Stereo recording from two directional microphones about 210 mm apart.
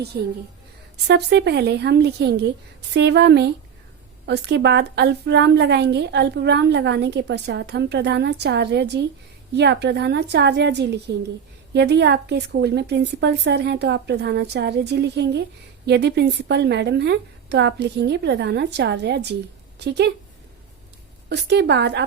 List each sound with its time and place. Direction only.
1.0 s a woman's voice: 55° right (ahead or behind)
21.2 s a woman's voice: 55° right (ahead or behind)